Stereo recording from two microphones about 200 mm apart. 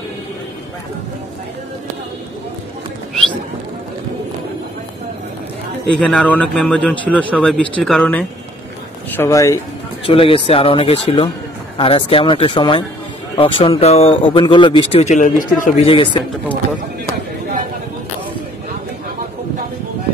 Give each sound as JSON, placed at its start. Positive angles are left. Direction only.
{"t": 5.9, "sound": "speech", "side_deg": 5}
{"t": 10.0, "sound": "speech", "side_deg": 25}
{"t": 15.9, "sound": "speech", "side_deg": 25}